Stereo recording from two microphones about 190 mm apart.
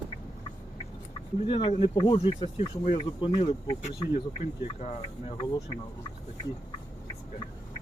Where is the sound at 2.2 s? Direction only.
35° left (ahead or behind).